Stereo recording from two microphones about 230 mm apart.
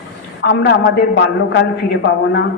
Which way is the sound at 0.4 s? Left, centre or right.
Left.